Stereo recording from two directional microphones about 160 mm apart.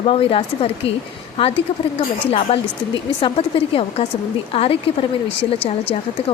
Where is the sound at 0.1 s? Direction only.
35° left (ahead or behind).